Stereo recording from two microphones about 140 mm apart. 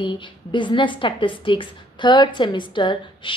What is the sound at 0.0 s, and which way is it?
A woman's voice, 35° left (ahead or behind).